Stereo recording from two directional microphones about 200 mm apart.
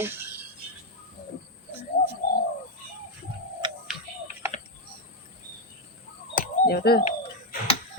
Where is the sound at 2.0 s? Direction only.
50° left (ahead or behind).